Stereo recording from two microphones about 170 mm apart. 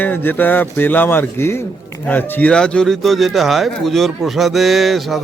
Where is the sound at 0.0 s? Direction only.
10° left (ahead or behind).